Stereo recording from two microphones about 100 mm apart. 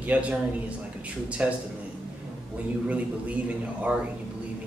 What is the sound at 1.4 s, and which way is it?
Speech, 15° right (ahead or behind).